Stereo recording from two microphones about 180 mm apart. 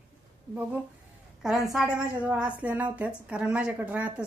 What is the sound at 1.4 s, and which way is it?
A woman's voice, centre (ahead or behind).